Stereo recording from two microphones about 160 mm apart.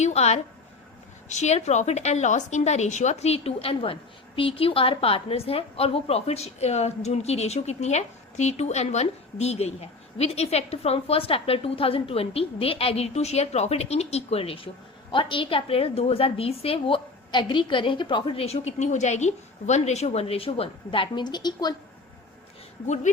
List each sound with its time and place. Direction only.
0.0 s a woman's voice: 45° left (ahead or behind); by 21.8 s 25° left (ahead or behind)